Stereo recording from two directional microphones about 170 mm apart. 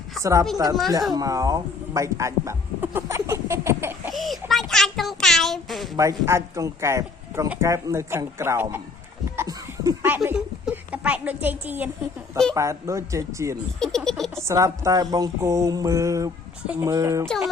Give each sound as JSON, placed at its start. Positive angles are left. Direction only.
{"t": 0.2, "sound": "speech", "side_deg": -20}
{"t": 0.5, "sound": "mantra", "side_deg": -20}
{"t": 1.1, "sound": "speech", "side_deg": -20}
{"t": 4.1, "sound": "a child's voice", "side_deg": 0}
{"t": 6.0, "sound": "speech", "side_deg": -15}
{"t": 9.3, "sound": "laughter", "side_deg": -20}
{"t": 10.2, "sound": "speech", "side_deg": -5}
{"t": 13.7, "sound": "speech", "side_deg": 5}
{"t": 14.3, "sound": "mantra", "side_deg": -15}
{"t": 17.2, "sound": "speech", "side_deg": 0}